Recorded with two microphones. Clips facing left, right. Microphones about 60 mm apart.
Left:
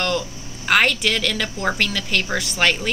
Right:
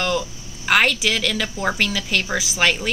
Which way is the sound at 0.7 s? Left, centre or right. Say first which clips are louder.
Even; centre.